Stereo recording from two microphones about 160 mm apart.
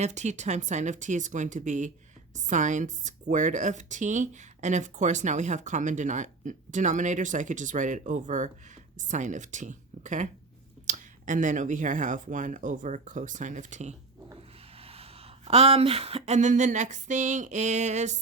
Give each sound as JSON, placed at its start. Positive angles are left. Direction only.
{"t": 0.0, "sound": "speech", "side_deg": -45}
{"t": 14.8, "sound": "speech", "side_deg": -40}